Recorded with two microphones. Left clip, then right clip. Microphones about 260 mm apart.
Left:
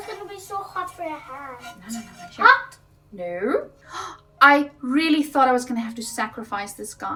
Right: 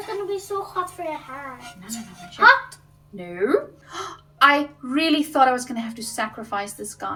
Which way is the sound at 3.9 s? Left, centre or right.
Centre.